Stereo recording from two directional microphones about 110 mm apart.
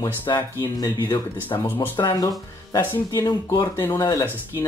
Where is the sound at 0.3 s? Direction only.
35° left (ahead or behind).